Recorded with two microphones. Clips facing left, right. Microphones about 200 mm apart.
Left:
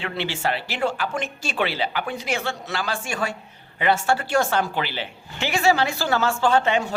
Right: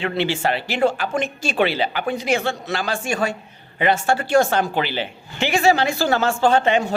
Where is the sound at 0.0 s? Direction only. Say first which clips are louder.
Right 5 dB; 20° right (ahead or behind).